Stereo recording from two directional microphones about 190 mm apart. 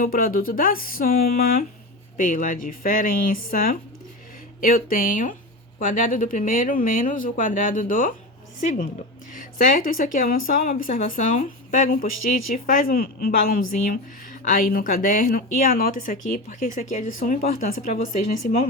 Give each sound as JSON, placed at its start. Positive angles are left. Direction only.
{"t": 0.0, "sound": "a woman's voice", "side_deg": 50}
{"t": 9.3, "sound": "a woman's voice", "side_deg": 45}